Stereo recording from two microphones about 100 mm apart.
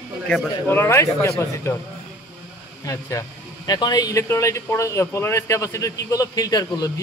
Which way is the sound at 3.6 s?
40° left (ahead or behind).